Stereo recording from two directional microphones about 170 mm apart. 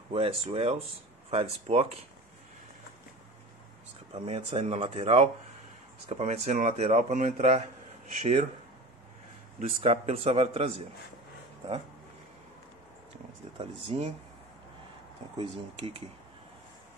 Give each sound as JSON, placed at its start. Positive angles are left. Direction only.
{"t": 0.1, "sound": "speech", "side_deg": -35}
{"t": 4.1, "sound": "speech", "side_deg": -30}
{"t": 9.6, "sound": "speech", "side_deg": -35}
{"t": 13.6, "sound": "speech", "side_deg": -35}
{"t": 15.3, "sound": "speech", "side_deg": -30}